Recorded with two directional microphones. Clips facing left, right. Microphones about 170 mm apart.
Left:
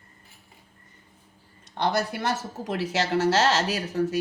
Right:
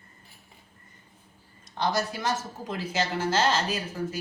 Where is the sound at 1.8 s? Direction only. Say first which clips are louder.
Left 2 dB; 60° left (ahead or behind).